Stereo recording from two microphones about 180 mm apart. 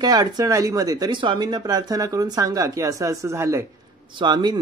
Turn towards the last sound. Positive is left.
turn(degrees=-25)  # may be behind; listen again after turning